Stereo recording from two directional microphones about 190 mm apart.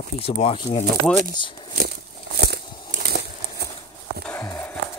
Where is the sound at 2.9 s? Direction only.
55° right (ahead or behind).